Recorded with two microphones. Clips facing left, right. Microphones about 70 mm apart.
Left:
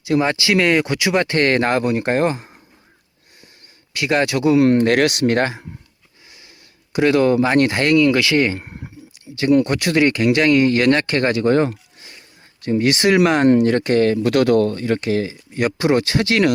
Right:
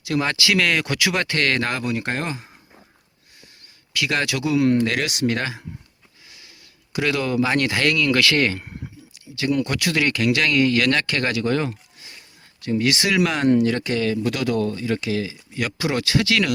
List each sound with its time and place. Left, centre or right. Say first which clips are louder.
0.0 s speech: left 4 dB; left
3.9 s speech: left 5 dB; left
6.9 s speech: left 7 dB; left